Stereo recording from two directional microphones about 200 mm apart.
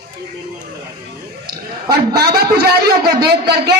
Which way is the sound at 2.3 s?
50° right (ahead or behind).